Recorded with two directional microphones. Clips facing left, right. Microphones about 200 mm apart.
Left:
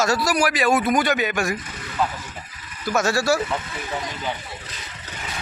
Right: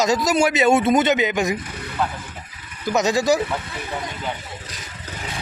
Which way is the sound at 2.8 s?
20° right (ahead or behind).